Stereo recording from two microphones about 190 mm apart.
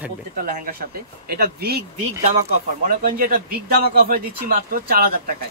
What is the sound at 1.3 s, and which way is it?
Speech, 55° right (ahead or behind).